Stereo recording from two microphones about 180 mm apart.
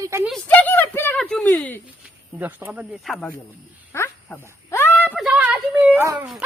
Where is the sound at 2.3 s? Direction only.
10° right (ahead or behind).